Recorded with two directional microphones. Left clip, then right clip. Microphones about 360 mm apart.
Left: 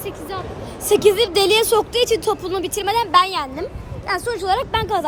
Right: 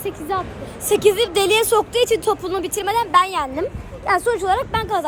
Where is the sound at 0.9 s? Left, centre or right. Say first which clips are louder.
Left 1 dB; centre.